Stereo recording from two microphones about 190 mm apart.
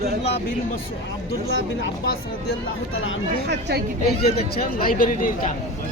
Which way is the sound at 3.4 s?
60° right (ahead or behind).